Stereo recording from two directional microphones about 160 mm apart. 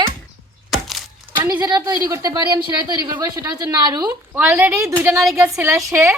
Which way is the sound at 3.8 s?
25° right (ahead or behind).